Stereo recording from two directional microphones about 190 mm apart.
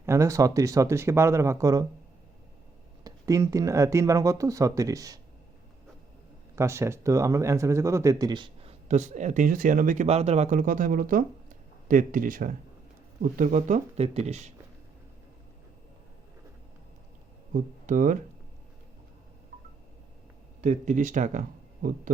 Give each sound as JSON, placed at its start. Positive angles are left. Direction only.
{"t": 0.0, "sound": "speech", "side_deg": -15}
{"t": 3.0, "sound": "speech", "side_deg": -20}
{"t": 6.6, "sound": "speech", "side_deg": -15}
{"t": 8.9, "sound": "speech", "side_deg": -40}
{"t": 17.5, "sound": "speech", "side_deg": -45}
{"t": 20.6, "sound": "speech", "side_deg": -40}